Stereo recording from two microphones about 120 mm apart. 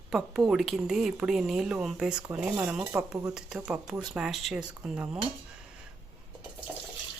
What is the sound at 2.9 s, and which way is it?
Speech, 20° right (ahead or behind).